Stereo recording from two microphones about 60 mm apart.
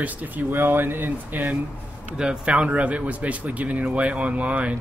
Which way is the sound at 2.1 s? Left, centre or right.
Centre.